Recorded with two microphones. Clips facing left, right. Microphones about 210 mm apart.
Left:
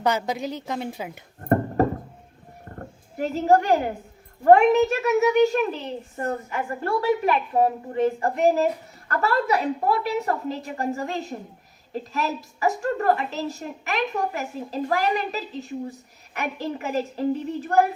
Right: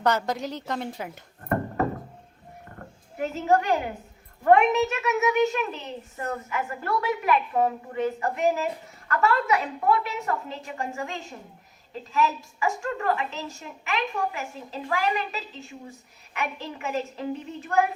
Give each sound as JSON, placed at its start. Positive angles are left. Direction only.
{"t": 0.0, "sound": "a woman's voice", "side_deg": 10}
{"t": 1.4, "sound": "a sound", "side_deg": 40}
{"t": 4.4, "sound": "a woman's voice", "side_deg": 30}